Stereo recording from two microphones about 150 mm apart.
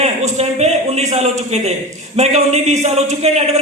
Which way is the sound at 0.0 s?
45° right (ahead or behind).